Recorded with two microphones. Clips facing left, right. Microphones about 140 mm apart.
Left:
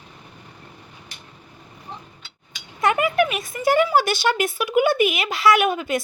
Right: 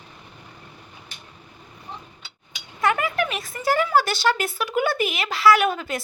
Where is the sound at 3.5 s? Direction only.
15° left (ahead or behind).